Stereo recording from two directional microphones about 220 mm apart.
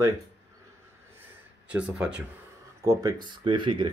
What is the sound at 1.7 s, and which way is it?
Speech, 5° right (ahead or behind).